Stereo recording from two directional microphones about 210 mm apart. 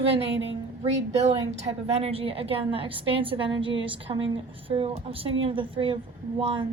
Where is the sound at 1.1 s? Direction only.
30° right (ahead or behind).